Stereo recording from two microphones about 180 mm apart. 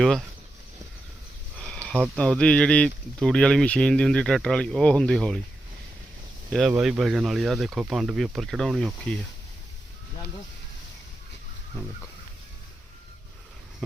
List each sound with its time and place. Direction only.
1.5 s a sound: 5° left (ahead or behind)
2.1 s speech: 5° left (ahead or behind)
6.7 s speech: 10° right (ahead or behind)